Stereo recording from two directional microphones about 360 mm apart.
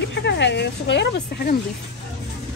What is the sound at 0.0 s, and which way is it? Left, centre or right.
Speech, left.